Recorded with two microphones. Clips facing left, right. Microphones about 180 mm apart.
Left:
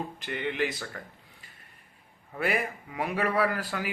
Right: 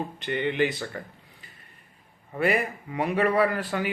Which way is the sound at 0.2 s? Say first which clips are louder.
Right 6 dB; centre (ahead or behind).